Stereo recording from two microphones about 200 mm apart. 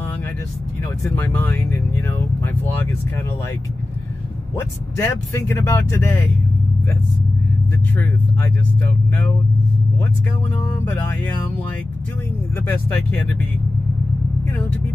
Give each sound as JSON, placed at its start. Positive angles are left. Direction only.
{"t": 1.0, "sound": "speech", "side_deg": 10}
{"t": 4.9, "sound": "speech", "side_deg": 15}
{"t": 7.9, "sound": "speech", "side_deg": 10}
{"t": 10.9, "sound": "speech", "side_deg": 10}
{"t": 12.6, "sound": "speech", "side_deg": 10}